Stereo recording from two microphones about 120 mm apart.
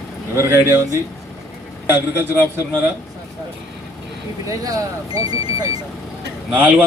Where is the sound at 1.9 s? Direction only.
20° right (ahead or behind).